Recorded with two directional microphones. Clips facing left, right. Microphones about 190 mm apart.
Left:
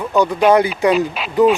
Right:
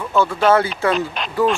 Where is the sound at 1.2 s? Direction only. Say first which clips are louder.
Left 1 dB; 5° left (ahead or behind).